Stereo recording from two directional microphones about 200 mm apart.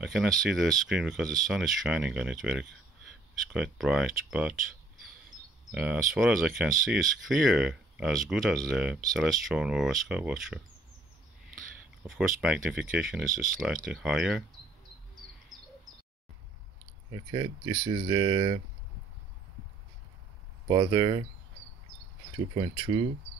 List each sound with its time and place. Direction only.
0.0 s speech: centre (ahead or behind)
5.7 s speech: 5° right (ahead or behind)
12.0 s speech: 10° right (ahead or behind)
17.1 s speech: 20° right (ahead or behind)
20.6 s speech: 20° right (ahead or behind)
22.5 s speech: 25° right (ahead or behind)